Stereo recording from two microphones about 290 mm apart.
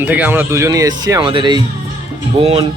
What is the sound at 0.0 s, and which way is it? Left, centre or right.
Speech, centre.